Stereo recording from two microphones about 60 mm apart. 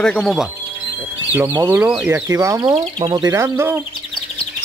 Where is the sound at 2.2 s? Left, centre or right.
Right.